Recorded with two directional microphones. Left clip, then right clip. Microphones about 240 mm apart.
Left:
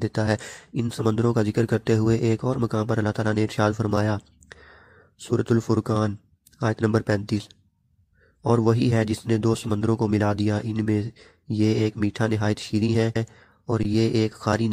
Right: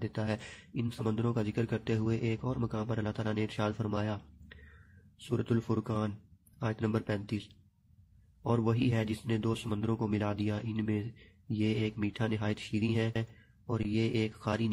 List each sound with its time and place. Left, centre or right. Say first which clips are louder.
0.0 s speech: left 12 dB; left
5.3 s speech: left 10 dB; left
8.5 s speech: left 10 dB; left